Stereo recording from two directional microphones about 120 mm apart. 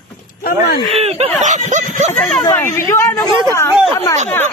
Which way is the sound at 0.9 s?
75° right (ahead or behind).